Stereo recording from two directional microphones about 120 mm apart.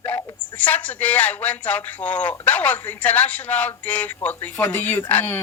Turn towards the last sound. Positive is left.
turn(degrees=15)  # may be behind; listen again after turning